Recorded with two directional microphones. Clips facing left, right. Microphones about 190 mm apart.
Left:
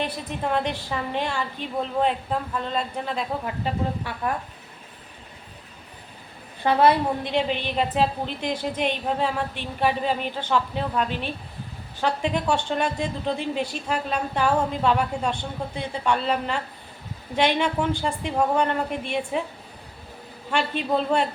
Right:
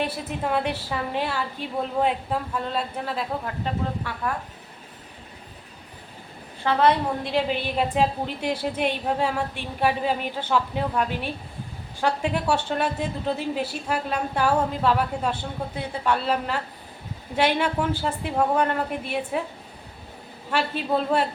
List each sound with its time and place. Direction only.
0.0 s a woman's voice: 5° right (ahead or behind)
6.7 s a woman's voice: 15° left (ahead or behind)
7.3 s a woman's voice: 5° right (ahead or behind)
20.5 s a woman's voice: 5° right (ahead or behind)